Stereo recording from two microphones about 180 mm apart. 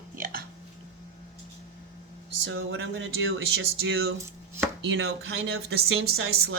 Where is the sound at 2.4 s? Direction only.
90° right.